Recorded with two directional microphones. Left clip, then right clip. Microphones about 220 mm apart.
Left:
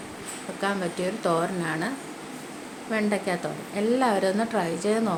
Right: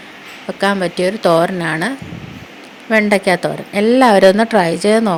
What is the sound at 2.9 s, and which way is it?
A woman's voice, 40° right (ahead or behind).